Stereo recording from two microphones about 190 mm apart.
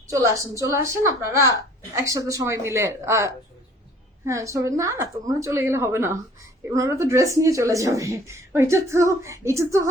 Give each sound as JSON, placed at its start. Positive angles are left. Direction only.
{"t": 0.1, "sound": "speech", "side_deg": -15}